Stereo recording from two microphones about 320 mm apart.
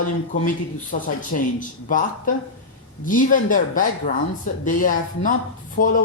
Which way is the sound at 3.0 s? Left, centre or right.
Left.